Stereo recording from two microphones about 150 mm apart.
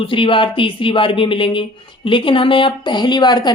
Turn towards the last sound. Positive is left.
turn(degrees=30)  # may be behind; listen again after turning